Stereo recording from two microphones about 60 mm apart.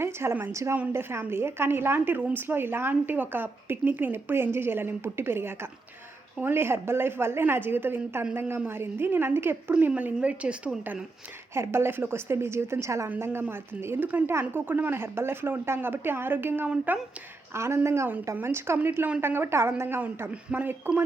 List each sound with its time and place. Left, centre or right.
0.0 s a woman's voice: right
9.7 s a woman's voice: right
11.5 s a woman's voice: right
13.1 s a woman's voice: right
17.5 s a woman's voice: right